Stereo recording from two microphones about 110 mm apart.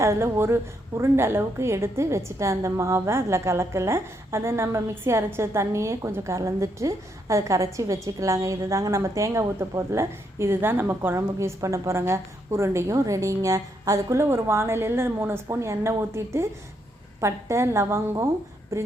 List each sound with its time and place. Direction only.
0.0 s a woman's voice: 25° right (ahead or behind)